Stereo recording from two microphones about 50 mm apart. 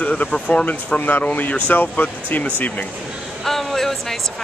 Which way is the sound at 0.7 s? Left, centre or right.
Left.